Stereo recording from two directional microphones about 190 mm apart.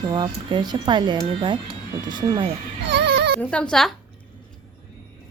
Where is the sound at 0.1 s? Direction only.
25° right (ahead or behind).